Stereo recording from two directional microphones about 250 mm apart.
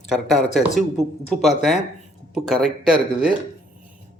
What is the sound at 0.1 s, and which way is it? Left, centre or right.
Speech, centre.